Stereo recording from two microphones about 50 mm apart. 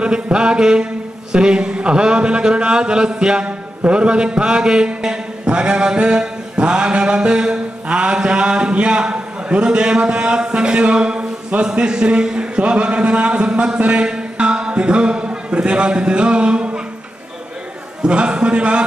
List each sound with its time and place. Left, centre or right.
0.0 s a sound: centre
1.3 s a man's voice: centre
18.0 s a man's voice: right